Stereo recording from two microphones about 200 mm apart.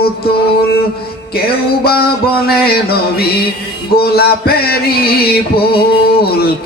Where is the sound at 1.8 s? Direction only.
50° left (ahead or behind).